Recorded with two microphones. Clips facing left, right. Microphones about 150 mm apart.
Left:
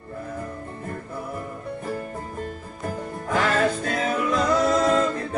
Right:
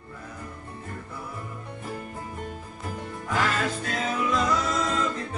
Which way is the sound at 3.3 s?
50° left (ahead or behind).